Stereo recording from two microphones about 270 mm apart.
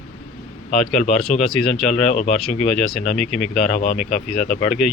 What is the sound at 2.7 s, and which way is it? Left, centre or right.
Speech, centre.